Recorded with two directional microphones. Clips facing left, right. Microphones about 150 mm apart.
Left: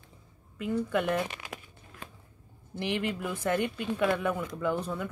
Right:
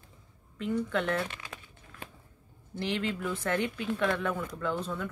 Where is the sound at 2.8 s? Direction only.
15° left (ahead or behind).